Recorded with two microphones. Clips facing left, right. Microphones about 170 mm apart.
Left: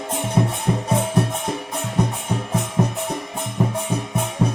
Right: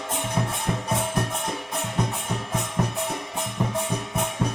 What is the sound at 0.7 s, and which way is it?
Music, 25° left (ahead or behind).